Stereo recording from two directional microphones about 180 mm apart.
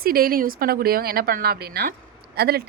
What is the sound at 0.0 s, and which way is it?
Speech, 55° right (ahead or behind).